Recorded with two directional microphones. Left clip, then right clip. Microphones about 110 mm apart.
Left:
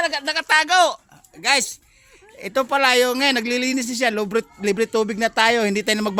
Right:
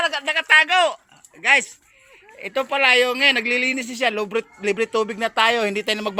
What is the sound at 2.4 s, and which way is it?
A woman's voice, 55° left (ahead or behind).